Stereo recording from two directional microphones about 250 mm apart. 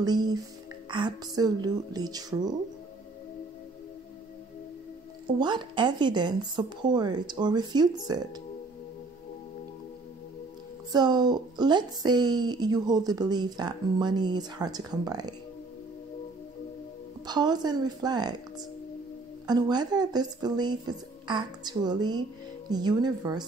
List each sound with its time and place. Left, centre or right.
0.0 s a woman's voice: centre
5.4 s a woman's voice: centre
10.9 s a woman's voice: centre
17.3 s a woman's voice: centre
19.4 s a woman's voice: centre